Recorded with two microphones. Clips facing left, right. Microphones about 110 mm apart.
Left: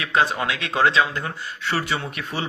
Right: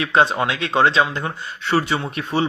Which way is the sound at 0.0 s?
30° right (ahead or behind).